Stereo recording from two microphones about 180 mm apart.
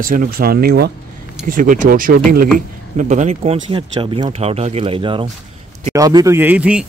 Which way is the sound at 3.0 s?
40° right (ahead or behind).